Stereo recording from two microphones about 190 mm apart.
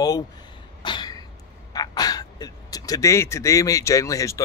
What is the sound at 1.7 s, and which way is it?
A man's voice, 20° left (ahead or behind).